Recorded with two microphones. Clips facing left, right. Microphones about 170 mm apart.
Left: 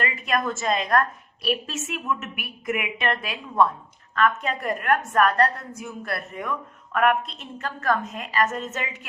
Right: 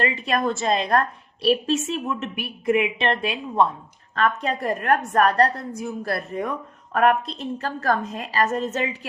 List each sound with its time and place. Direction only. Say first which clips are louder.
0.0 s a woman's voice: right 3 dB; 30° right (ahead or behind)